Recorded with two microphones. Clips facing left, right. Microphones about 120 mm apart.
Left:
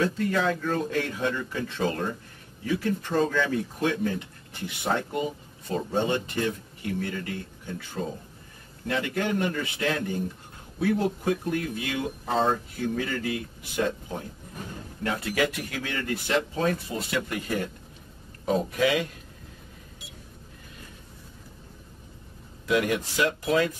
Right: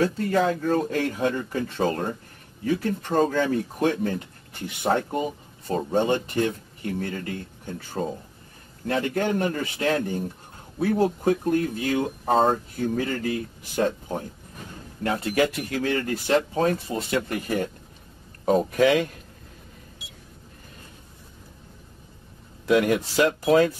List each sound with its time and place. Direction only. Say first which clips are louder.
0.0 s speech: right 3 dB; 40° right (ahead or behind)
15.3 s speech: right 5 dB; 30° right (ahead or behind)
22.7 s speech: right 4 dB; 35° right (ahead or behind)